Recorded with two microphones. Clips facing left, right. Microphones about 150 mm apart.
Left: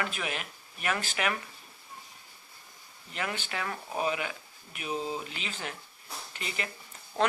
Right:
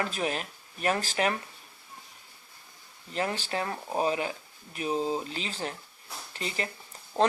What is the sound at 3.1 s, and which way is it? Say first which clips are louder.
Speech: right 5 dB; 35° right (ahead or behind).